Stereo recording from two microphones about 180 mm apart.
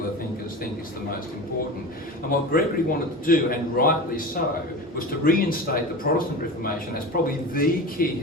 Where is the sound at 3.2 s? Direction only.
55° left (ahead or behind).